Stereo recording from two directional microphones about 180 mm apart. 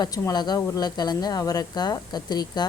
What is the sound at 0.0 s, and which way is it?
Speech, 20° left (ahead or behind).